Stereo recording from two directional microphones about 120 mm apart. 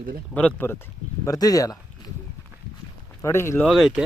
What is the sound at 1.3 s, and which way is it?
Speech, 30° left (ahead or behind).